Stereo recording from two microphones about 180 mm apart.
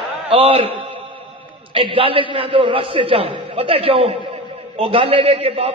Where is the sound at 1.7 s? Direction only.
30° right (ahead or behind).